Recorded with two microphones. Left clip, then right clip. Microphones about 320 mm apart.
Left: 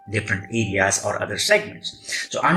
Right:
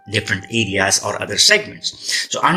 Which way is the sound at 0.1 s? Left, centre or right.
Right.